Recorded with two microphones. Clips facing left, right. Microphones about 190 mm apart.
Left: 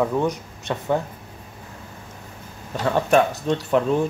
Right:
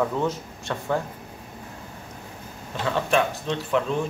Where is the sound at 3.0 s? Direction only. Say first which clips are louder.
Left 6 dB; 45° left (ahead or behind).